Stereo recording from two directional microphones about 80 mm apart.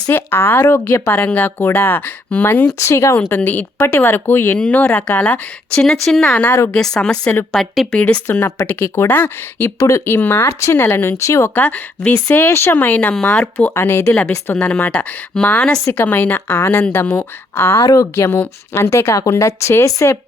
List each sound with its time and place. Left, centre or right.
0.1 s speech: left
2.7 s a woman's voice: left
3.2 s speech: left
5.8 s speech: centre
7.9 s speech: centre
8.3 s speech: left
9.7 s a woman's voice: left
10.2 s a woman's voice: left
11.5 s speech: centre
12.5 s speech: left
13.1 s speech: centre
13.7 s a woman's voice: left; by 15.8 s centre
15.8 s a woman's voice: left
18.3 s a woman's voice: left